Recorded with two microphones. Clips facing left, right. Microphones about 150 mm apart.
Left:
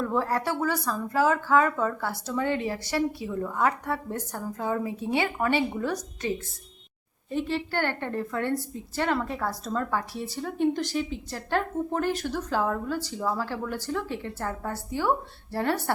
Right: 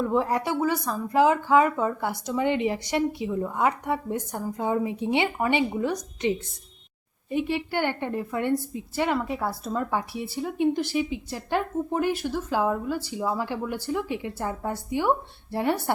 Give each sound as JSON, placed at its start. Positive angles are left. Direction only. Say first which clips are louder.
{"t": 0.0, "sound": "speech", "louder": "right 2 dB", "side_deg": -15}